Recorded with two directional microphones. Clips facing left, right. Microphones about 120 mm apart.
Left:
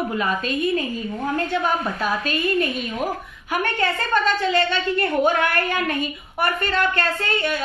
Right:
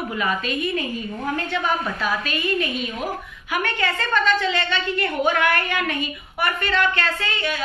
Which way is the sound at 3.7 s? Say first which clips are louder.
Left 2 dB; 40° left (ahead or behind).